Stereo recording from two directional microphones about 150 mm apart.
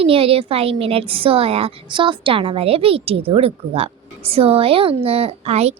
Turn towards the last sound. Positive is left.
turn(degrees=-45)  # may be behind; listen again after turning